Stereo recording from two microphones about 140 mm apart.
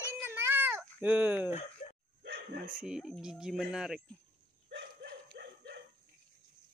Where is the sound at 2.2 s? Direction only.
85° right.